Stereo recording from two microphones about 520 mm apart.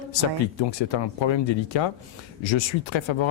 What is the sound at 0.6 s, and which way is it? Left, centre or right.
Speech, left.